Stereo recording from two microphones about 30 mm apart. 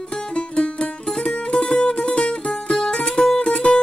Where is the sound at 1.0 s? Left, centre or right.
Left.